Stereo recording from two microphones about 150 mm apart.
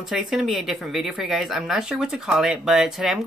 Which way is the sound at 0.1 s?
5° right (ahead or behind).